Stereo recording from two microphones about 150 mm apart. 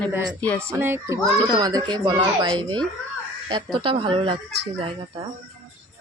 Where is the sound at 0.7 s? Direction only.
15° right (ahead or behind); by 4.3 s 35° right (ahead or behind).